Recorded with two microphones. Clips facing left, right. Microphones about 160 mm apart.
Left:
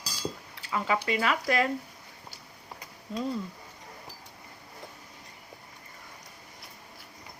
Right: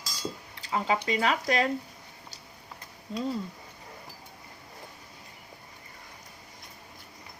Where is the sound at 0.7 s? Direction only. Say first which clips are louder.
Right 1 dB; 30° right (ahead or behind).